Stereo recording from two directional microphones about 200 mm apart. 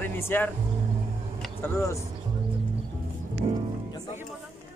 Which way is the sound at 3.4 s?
30° right (ahead or behind).